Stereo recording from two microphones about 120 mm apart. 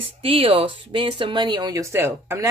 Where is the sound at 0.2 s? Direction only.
50° right (ahead or behind).